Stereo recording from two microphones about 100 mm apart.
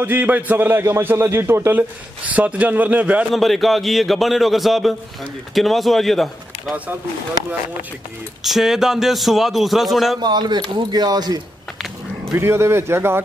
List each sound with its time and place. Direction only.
0.0 s a man's voice: 20° right (ahead or behind)
3.3 s a man's voice: centre (ahead or behind)
8.5 s a man's voice: 5° right (ahead or behind)
10.2 s speech: 45° right (ahead or behind)
12.3 s a man's voice: 25° right (ahead or behind)